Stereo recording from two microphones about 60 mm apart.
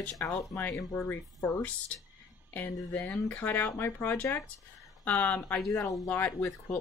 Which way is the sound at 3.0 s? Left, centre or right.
Left.